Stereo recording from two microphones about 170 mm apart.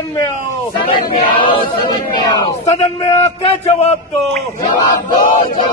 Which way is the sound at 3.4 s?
40° left (ahead or behind).